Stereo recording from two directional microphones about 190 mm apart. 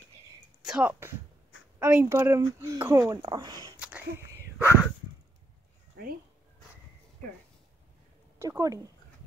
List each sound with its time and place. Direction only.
0.6 s a woman's voice: 5° right (ahead or behind); by 3.7 s 20° right (ahead or behind)
3.8 s a sound: 10° right (ahead or behind)
8.4 s a woman's voice: 20° right (ahead or behind)